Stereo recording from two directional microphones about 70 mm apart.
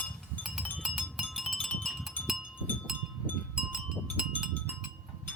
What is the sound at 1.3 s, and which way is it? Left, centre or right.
Wind chime, centre.